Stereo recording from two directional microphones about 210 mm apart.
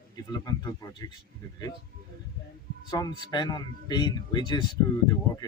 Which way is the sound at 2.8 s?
20° left (ahead or behind).